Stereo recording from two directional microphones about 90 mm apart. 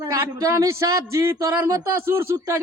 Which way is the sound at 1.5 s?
50° right (ahead or behind).